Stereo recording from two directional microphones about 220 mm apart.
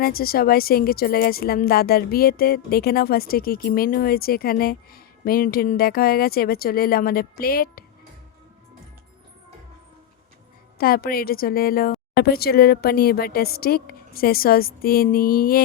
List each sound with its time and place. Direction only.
0.0 s a woman's voice: 45° left (ahead or behind)
10.8 s a woman's voice: 45° left (ahead or behind)